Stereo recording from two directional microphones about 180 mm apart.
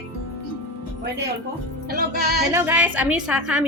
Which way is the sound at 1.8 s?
60° right (ahead or behind).